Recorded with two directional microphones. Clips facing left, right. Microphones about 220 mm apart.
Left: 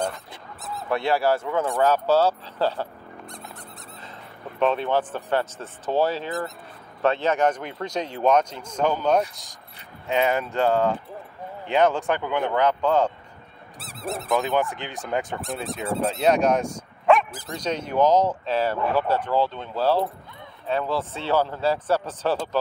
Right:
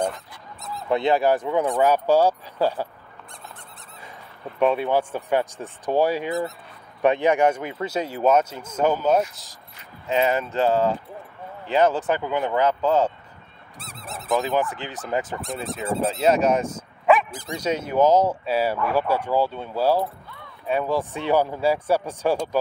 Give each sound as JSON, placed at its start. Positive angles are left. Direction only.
{"t": 0.8, "sound": "speech", "side_deg": -20}
{"t": 4.6, "sound": "speech", "side_deg": -10}
{"t": 17.6, "sound": "speech", "side_deg": -10}